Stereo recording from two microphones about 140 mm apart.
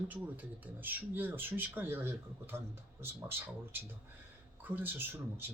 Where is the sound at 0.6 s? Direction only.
15° right (ahead or behind).